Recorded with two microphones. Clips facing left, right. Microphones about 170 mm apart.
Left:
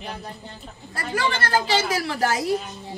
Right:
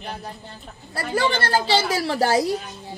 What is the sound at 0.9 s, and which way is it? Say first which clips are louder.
A woman's voice: right 3 dB; 30° right (ahead or behind).